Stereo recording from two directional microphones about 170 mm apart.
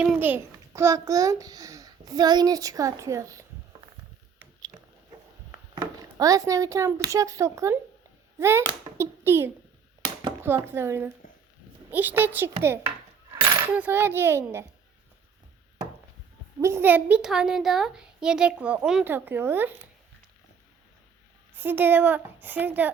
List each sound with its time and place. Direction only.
0.0 s a child's voice: 5° right (ahead or behind)
5.7 s a child's voice: 20° right (ahead or behind)
16.6 s a woman's voice: 15° right (ahead or behind)
21.5 s a woman's voice: 10° right (ahead or behind)